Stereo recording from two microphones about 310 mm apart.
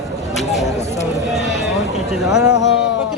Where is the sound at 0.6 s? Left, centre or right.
Left.